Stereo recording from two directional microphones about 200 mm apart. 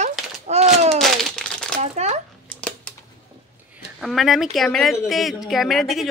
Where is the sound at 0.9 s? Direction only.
Centre (ahead or behind).